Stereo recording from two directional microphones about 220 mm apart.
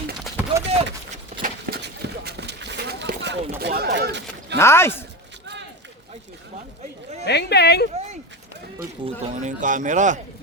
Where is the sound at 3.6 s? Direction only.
45° right (ahead or behind).